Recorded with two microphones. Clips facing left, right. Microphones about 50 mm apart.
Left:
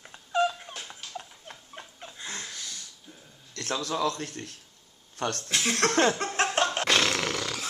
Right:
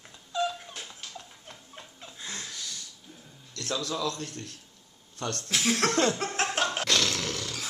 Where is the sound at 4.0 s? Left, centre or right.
Left.